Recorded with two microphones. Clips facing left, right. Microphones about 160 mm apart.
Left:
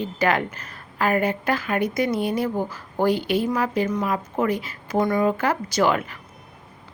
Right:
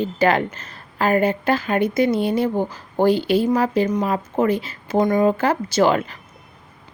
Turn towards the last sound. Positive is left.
turn(degrees=-30)  # may be behind; listen again after turning